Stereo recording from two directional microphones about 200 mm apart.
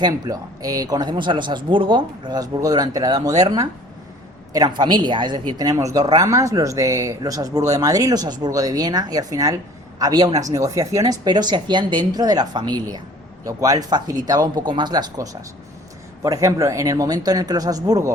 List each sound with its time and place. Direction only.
0.0 s a woman's voice: 20° right (ahead or behind)